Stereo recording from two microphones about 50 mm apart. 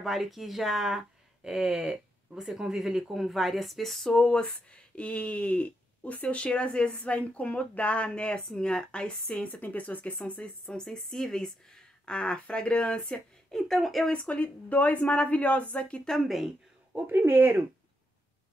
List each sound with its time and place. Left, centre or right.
0.0 s speech: centre
4.9 s speech: left
9.5 s speech: left
10.7 s speech: centre
14.1 s speech: left
16.1 s speech: centre
17.1 s speech: right